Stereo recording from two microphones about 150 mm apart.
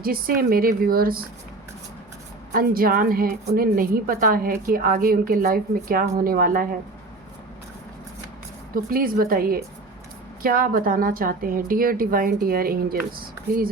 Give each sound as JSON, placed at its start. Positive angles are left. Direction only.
{"t": 0.0, "sound": "a woman's voice", "side_deg": -75}
{"t": 2.5, "sound": "a woman's voice", "side_deg": -75}
{"t": 8.7, "sound": "a woman's voice", "side_deg": -75}